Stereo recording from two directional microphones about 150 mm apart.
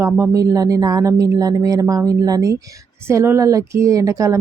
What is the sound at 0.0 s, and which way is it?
A woman's voice, 20° right (ahead or behind).